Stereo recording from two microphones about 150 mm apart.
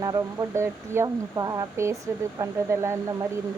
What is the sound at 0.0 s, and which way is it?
Speech, 25° right (ahead or behind).